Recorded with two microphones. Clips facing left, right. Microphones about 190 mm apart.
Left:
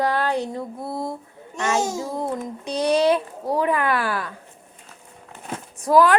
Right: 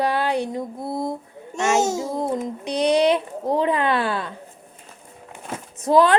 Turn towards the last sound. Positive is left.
turn(degrees=-25)  # may be behind; listen again after turning